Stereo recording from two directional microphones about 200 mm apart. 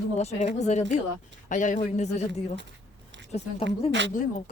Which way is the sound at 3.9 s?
60° right (ahead or behind).